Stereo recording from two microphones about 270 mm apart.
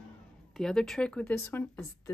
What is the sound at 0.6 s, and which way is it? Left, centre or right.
Speech, centre.